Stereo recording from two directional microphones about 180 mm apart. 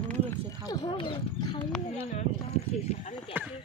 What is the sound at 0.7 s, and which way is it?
Speech, 25° left (ahead or behind).